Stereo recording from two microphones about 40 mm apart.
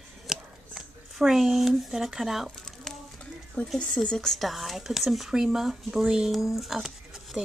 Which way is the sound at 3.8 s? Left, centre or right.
Left.